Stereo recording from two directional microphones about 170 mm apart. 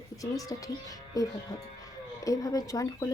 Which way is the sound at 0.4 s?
20° left (ahead or behind).